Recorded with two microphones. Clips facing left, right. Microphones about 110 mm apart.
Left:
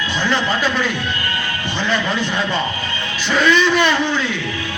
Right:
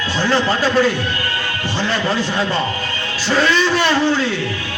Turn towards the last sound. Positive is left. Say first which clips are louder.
# right 1 dB
turn(degrees=-35)  # may be behind; listen again after turning